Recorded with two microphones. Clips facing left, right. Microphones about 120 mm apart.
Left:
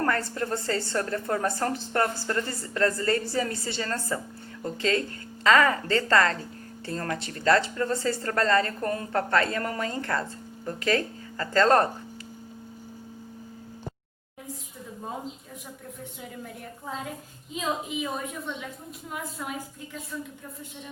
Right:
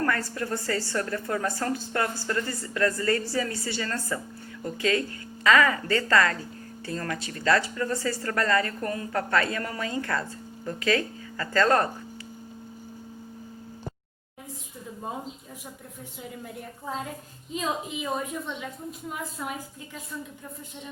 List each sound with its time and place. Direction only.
0.0 s speech: 25° left (ahead or behind)
17.5 s a woman's voice: centre (ahead or behind)